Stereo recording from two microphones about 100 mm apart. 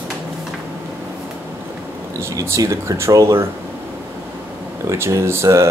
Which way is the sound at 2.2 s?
30° right (ahead or behind).